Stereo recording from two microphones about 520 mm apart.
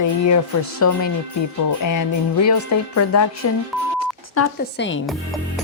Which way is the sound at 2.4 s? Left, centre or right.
Left.